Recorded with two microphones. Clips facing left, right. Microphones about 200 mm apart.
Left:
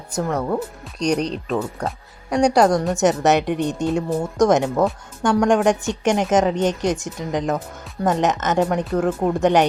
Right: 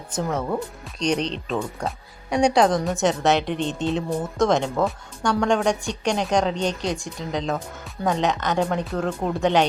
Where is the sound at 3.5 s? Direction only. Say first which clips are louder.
Left 3 dB; 15° left (ahead or behind).